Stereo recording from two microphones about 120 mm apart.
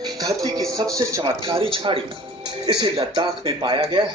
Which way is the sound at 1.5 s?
50° right (ahead or behind).